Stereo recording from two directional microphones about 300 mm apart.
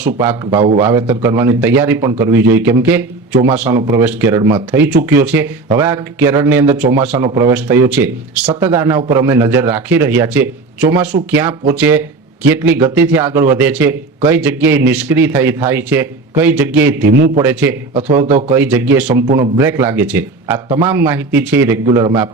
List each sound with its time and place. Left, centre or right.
0.0 s speech: centre
0.5 s a man's voice: right
0.8 s speech: centre
11.8 s speech: centre
17.0 s a man's voice: right
17.4 s speech: centre
17.9 s a man's voice: centre
18.5 s speech: centre